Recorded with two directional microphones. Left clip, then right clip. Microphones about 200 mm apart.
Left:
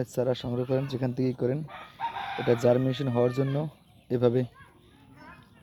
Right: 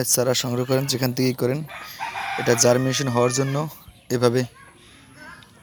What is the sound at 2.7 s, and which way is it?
Speech, centre (ahead or behind).